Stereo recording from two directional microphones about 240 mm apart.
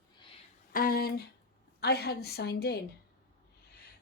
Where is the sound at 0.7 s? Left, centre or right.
Left.